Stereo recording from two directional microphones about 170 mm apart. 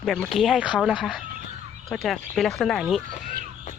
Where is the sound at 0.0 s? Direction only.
Centre (ahead or behind).